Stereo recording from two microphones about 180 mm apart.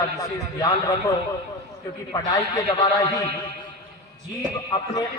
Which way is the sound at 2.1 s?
20° left (ahead or behind).